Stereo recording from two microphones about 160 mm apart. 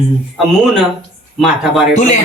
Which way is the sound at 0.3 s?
Centre (ahead or behind).